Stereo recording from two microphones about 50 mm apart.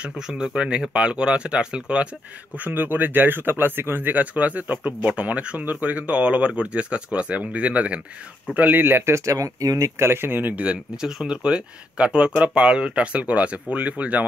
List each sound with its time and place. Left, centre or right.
0.0 s speech: centre
2.5 s speech: right
4.2 s speech: right
8.5 s speech: right
9.1 s speech: right
9.9 s speech: right
10.5 s speech: right
11.0 s speech: centre
11.4 s speech: right